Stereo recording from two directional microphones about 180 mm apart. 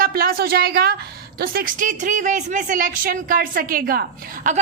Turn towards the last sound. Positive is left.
turn(degrees=-50)  # may be behind; listen again after turning